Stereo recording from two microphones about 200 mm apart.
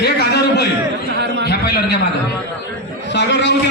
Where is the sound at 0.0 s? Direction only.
55° left (ahead or behind).